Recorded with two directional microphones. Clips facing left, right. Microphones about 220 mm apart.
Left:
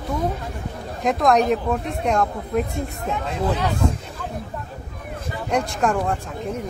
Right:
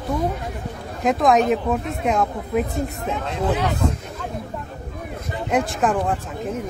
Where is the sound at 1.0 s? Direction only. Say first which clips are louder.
Right 1 dB; centre (ahead or behind).